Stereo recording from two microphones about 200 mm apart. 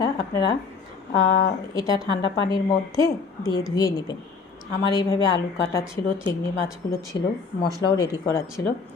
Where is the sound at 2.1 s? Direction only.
25° left (ahead or behind).